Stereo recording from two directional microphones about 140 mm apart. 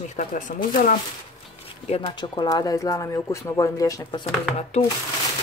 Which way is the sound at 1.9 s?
45° left (ahead or behind).